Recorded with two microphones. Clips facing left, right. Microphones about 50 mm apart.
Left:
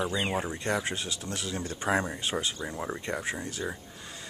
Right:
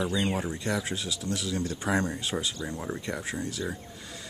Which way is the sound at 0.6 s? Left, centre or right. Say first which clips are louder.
Even; left.